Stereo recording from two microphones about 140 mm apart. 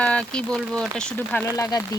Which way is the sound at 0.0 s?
10° left (ahead or behind).